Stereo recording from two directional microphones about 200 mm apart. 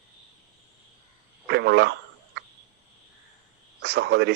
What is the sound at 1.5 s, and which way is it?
Speech, 55° right (ahead or behind).